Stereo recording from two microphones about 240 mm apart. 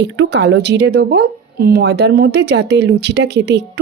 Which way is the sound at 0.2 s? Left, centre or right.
Right.